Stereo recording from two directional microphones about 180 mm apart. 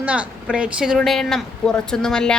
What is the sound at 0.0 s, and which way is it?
A woman's voice, 5° right (ahead or behind).